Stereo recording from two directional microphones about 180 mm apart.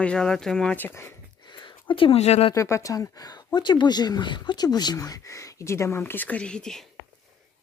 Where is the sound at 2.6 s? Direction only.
15° left (ahead or behind).